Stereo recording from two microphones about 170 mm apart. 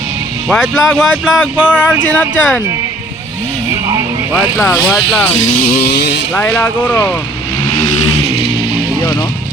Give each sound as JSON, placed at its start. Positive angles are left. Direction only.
{"t": 0.4, "sound": "speech", "side_deg": 0}
{"t": 4.4, "sound": "speech", "side_deg": 0}
{"t": 5.5, "sound": "a sound", "side_deg": 55}
{"t": 6.3, "sound": "speech", "side_deg": 10}
{"t": 8.1, "sound": "music", "side_deg": 35}